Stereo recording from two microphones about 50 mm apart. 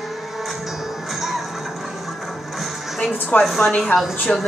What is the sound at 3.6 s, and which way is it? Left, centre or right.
Speech, left.